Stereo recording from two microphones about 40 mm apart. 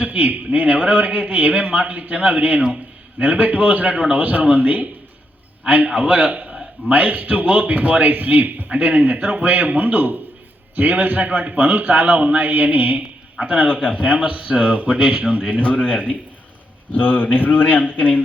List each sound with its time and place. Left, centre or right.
0.0 s a man's voice: right
1.8 s a man's voice: right
11.3 s a man's voice: right
13.4 s speech: right
15.4 s a man's voice: left